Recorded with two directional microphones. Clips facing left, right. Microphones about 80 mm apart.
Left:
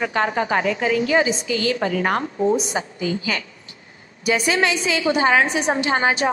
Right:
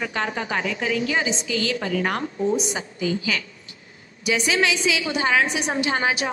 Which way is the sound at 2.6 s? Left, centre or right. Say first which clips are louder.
Left 2 dB; left.